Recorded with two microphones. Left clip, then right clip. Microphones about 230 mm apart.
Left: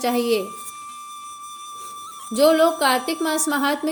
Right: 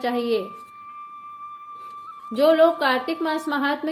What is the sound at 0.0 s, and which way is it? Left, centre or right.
Speech, left.